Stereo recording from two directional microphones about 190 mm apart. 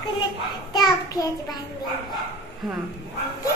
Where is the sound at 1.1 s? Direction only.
20° left (ahead or behind).